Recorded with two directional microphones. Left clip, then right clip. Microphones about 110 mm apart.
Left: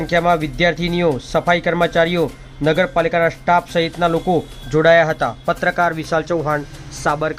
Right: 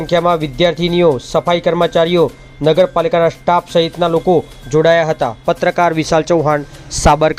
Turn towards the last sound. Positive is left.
turn(degrees=-85)